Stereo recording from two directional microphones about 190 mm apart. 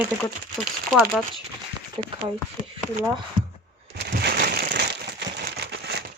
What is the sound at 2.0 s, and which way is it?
Speech, 30° right (ahead or behind).